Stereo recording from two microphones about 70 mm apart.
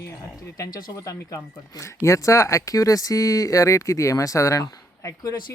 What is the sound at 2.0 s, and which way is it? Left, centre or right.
Speech, left.